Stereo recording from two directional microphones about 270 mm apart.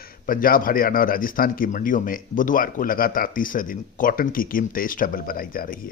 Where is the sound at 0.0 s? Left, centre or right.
Left.